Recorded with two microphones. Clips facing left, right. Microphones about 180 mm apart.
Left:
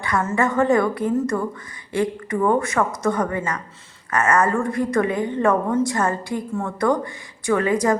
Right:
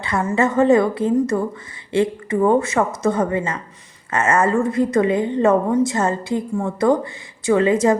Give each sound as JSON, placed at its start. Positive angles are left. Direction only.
{"t": 0.0, "sound": "a woman's voice", "side_deg": -20}